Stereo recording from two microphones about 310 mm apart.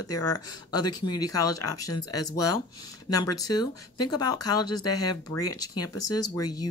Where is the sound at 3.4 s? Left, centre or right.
Centre.